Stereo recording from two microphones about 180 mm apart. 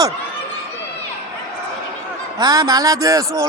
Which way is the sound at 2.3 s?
20° right (ahead or behind).